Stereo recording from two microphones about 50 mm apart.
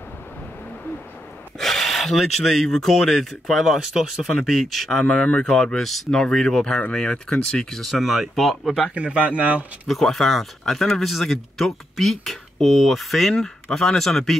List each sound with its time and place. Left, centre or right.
1.6 s speech: centre
3.6 s speech: centre
5.8 s speech: centre
6.0 s speech: centre
7.9 s speech: centre
8.9 s a man's voice: right
9.8 s speech: centre